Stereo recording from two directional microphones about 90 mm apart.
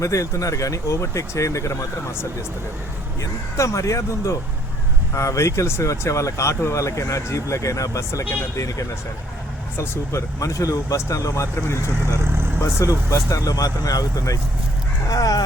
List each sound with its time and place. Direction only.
0.0 s speech: 35° left (ahead or behind)
3.2 s speech: 35° left (ahead or behind)
12.2 s vehicle: 25° right (ahead or behind)
12.6 s speech: 35° left (ahead or behind)